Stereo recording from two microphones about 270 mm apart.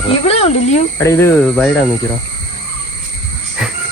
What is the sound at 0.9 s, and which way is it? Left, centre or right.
Speech, centre.